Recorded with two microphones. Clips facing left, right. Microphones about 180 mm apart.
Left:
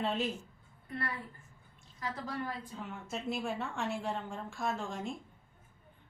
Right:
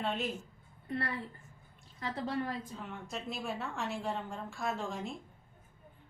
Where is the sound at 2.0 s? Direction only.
25° right (ahead or behind).